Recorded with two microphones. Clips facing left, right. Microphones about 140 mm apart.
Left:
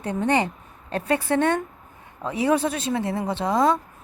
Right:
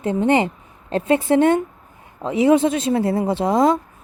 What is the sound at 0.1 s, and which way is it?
A woman's voice, 30° right (ahead or behind).